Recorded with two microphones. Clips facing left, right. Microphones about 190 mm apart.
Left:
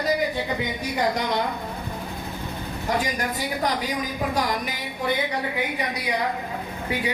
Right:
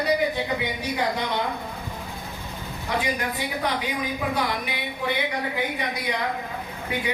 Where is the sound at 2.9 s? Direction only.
40° left (ahead or behind).